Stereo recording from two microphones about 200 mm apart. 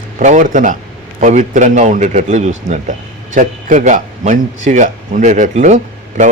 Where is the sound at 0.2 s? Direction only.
40° right (ahead or behind).